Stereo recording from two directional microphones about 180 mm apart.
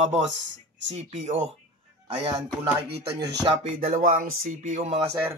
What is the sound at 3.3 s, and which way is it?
Speech, 35° right (ahead or behind).